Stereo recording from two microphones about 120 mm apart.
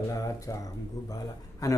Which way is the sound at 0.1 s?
25° left (ahead or behind).